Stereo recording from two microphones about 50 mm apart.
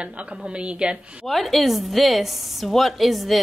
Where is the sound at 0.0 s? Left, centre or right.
Centre.